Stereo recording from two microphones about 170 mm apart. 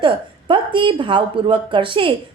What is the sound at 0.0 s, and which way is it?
Speech, 30° right (ahead or behind).